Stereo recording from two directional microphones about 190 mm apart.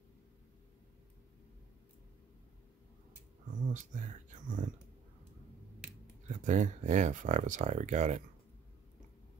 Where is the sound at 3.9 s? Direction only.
40° right (ahead or behind).